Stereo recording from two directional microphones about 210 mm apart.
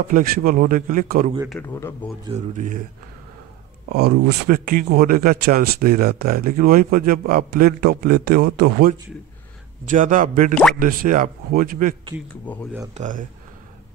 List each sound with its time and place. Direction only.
0.1 s speech: 45° right (ahead or behind)
1.5 s speech: 10° left (ahead or behind)
2.3 s speech: 35° right (ahead or behind)
3.9 s speech: 50° right (ahead or behind)
9.8 s speech: 40° right (ahead or behind)
12.5 s speech: 5° left (ahead or behind)
12.9 s speech: 35° right (ahead or behind)